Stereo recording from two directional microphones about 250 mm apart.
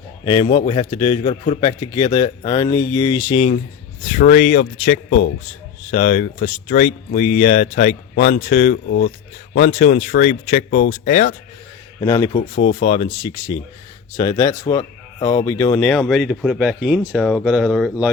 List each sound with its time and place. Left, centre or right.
0.3 s speech: left
8.9 s speech: left
11.9 s speech: centre